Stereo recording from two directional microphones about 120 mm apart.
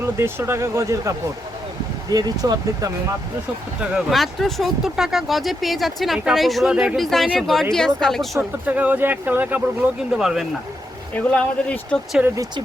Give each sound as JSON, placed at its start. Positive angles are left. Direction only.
{"t": 0.0, "sound": "speech", "side_deg": -20}
{"t": 3.8, "sound": "speech", "side_deg": -5}
{"t": 8.4, "sound": "speech", "side_deg": -15}
{"t": 10.1, "sound": "speech", "side_deg": -5}
{"t": 11.1, "sound": "speech", "side_deg": 10}